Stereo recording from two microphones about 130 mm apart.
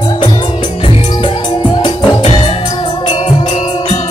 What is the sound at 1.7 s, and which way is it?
Music, 35° left (ahead or behind).